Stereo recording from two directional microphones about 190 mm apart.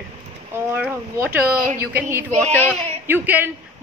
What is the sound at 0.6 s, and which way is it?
A woman's voice, 10° right (ahead or behind).